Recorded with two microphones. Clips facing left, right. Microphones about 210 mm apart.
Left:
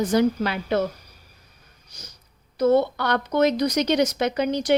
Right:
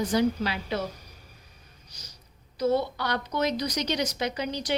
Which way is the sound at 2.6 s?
55° left (ahead or behind).